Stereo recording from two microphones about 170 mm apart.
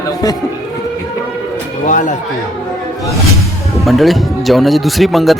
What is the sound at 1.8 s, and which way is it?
Speech, 50° left (ahead or behind).